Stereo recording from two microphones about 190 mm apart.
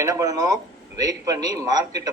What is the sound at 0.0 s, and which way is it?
A man's voice, 20° right (ahead or behind).